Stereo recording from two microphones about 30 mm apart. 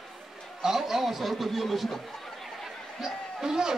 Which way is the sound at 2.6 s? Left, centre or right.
Centre.